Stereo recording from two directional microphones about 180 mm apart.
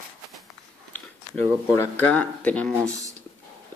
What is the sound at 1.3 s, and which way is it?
Speech, 10° left (ahead or behind).